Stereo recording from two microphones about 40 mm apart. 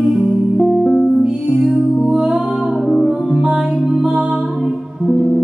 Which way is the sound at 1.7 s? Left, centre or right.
Centre.